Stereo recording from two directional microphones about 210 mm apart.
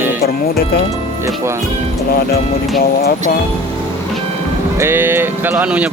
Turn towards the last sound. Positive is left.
turn(degrees=-5)  # may be behind; listen again after turning